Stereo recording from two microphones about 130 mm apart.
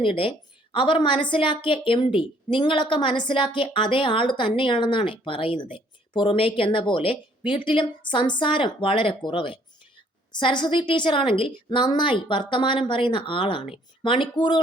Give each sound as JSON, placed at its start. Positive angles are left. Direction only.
{"t": 0.0, "sound": "a woman's voice", "side_deg": 45}